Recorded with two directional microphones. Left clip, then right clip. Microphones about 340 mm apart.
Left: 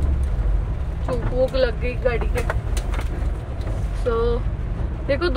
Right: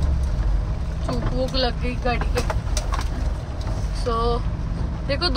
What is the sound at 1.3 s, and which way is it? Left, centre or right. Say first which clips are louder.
Speech: left 5 dB; centre.